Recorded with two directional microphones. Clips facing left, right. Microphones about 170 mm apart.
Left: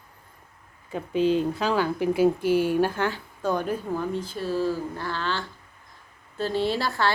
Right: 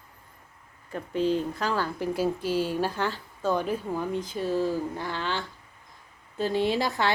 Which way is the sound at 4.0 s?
15° right (ahead or behind).